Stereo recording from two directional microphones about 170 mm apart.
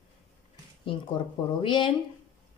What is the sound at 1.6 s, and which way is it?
Speech, 30° left (ahead or behind).